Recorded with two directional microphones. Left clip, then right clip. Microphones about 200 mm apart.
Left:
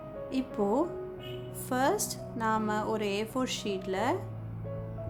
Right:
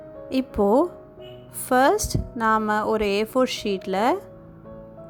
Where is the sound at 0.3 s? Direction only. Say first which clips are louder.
Right 10 dB; 35° right (ahead or behind).